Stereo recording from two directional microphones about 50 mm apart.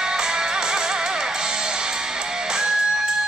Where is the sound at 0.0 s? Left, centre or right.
Centre.